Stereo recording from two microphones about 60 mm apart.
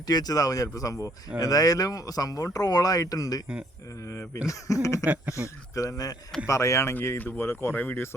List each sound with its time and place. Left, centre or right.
0.1 s speech: left
1.4 s speech: left
4.1 s speech: left
5.0 s speech: right
5.7 s speech: left
6.5 s speech: left
7.2 s speech: left